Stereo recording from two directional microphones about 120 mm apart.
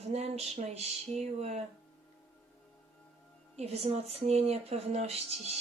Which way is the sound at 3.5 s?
65° right (ahead or behind).